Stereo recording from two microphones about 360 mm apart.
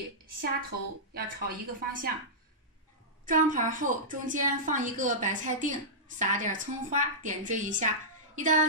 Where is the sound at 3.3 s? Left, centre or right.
Right.